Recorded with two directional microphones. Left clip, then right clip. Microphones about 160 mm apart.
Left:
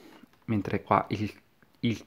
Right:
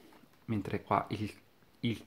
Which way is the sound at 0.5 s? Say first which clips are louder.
Left 7 dB; 30° left (ahead or behind).